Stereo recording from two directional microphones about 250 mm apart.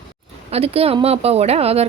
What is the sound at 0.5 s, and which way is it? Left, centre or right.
A woman's voice, right.